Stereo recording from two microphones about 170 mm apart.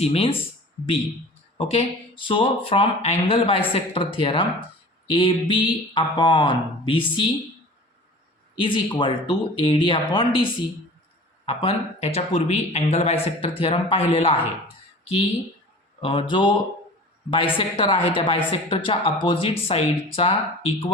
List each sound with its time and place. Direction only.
0.0 s a woman's voice: 35° left (ahead or behind)
1.5 s a woman's voice: 35° left (ahead or behind)
8.5 s speech: 30° left (ahead or behind)
11.4 s a woman's voice: 35° left (ahead or behind)
16.0 s a woman's voice: 30° left (ahead or behind)